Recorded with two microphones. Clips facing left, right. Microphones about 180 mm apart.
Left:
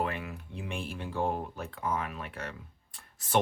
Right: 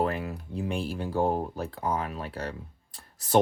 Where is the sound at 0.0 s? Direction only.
35° right (ahead or behind).